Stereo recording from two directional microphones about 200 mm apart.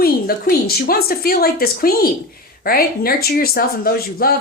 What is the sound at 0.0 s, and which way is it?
Speech, 50° left (ahead or behind).